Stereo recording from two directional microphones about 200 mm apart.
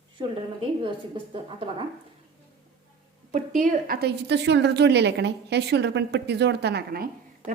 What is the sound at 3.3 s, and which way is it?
A woman's voice, 40° right (ahead or behind).